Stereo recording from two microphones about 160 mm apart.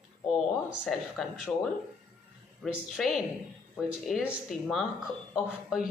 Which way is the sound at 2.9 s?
Centre (ahead or behind).